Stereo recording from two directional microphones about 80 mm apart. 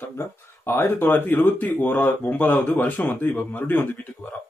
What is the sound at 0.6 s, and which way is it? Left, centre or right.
Speech, left.